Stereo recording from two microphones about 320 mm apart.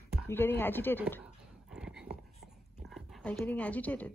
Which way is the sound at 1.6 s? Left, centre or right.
Centre.